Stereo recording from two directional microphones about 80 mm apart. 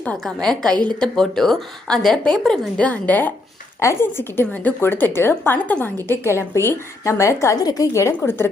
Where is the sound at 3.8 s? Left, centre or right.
Left.